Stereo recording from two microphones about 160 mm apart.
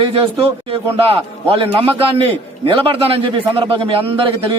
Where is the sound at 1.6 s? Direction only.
35° right (ahead or behind).